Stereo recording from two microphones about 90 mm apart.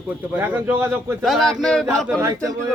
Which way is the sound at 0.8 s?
25° right (ahead or behind).